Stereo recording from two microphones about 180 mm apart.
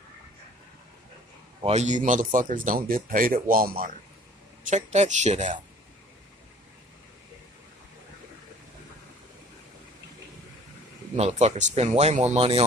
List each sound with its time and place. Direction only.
1.6 s a man's voice: 40° right (ahead or behind); by 3.9 s 55° right (ahead or behind)
4.6 s speech: 40° right (ahead or behind)
11.1 s speech: 40° right (ahead or behind)